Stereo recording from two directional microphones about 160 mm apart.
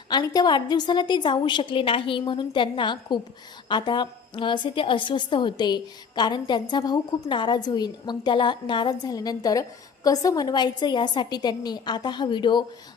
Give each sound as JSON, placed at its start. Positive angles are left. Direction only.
{"t": 0.1, "sound": "a woman's voice", "side_deg": 25}